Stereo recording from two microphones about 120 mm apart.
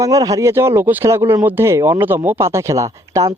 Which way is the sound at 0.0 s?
30° right (ahead or behind).